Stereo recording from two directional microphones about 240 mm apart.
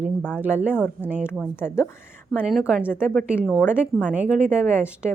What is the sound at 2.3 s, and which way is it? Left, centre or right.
A woman's voice, centre.